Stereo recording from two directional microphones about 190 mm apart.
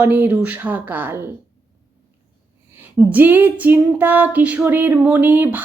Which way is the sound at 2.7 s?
10° right (ahead or behind).